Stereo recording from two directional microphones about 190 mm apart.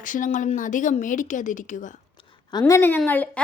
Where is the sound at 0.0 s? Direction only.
40° left (ahead or behind).